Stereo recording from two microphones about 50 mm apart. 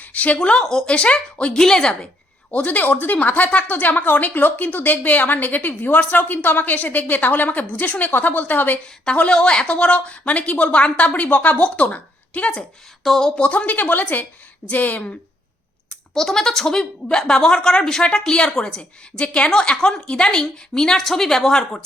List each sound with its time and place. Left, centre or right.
0.0 s a sound: left
0.3 s a woman's voice: centre
0.6 s speech: centre
0.9 s a woman's voice: left
1.5 s speech: centre
2.5 s a woman's voice: left
9.3 s a woman's voice: centre
13.1 s speech: centre
13.3 s a woman's voice: left
16.1 s speech: centre